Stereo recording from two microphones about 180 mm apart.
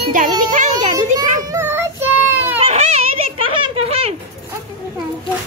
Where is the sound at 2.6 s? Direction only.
35° right (ahead or behind).